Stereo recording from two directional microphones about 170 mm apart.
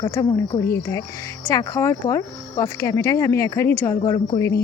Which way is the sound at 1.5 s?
20° left (ahead or behind).